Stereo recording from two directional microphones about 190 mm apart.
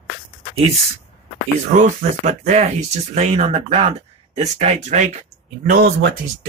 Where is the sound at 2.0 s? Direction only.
40° right (ahead or behind).